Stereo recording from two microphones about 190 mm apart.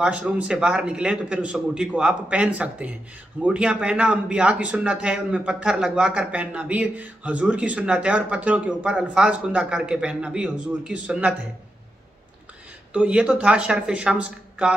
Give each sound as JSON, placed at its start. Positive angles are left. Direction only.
{"t": 0.0, "sound": "speech", "side_deg": -5}
{"t": 12.9, "sound": "speech", "side_deg": -5}